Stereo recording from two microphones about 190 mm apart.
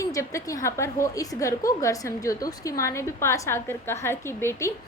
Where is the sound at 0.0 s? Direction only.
15° left (ahead or behind).